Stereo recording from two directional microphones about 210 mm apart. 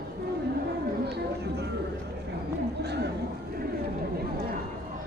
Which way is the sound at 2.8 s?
50° right (ahead or behind).